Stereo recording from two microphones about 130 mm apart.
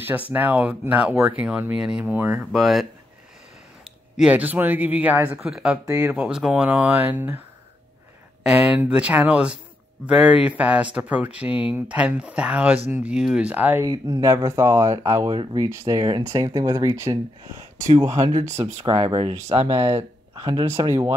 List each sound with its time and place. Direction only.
0.0 s speech: 15° right (ahead or behind)
2.5 s speech: centre (ahead or behind)
4.2 s speech: 10° right (ahead or behind)
5.9 s speech: 25° right (ahead or behind)
6.1 s speech: 5° right (ahead or behind)
8.5 s speech: 5° right (ahead or behind)
13.8 s speech: 30° right (ahead or behind)
18.6 s speech: 55° right (ahead or behind)
20.0 s a sound: 25° right (ahead or behind)
20.6 s speech: 20° right (ahead or behind)